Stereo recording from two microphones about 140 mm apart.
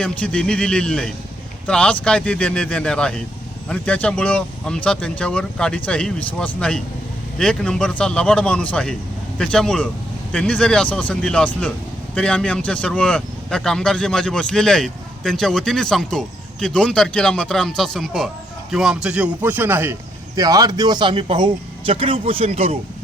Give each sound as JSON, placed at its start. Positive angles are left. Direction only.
{"t": 0.0, "sound": "speech", "side_deg": 10}